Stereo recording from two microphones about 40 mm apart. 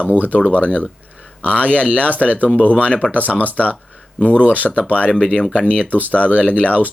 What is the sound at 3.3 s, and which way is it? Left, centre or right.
Speech, right.